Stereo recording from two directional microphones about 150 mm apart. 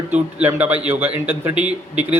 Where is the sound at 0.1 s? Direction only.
10° right (ahead or behind).